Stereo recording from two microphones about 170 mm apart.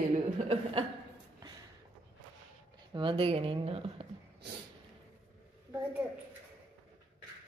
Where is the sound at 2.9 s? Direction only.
30° right (ahead or behind).